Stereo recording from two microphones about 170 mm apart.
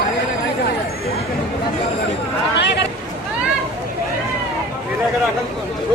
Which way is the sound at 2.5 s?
90° left.